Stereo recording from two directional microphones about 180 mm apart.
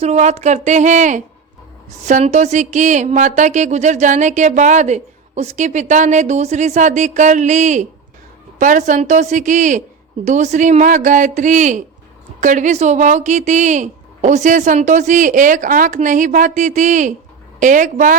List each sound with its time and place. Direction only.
0.0 s speech: 40° right (ahead or behind)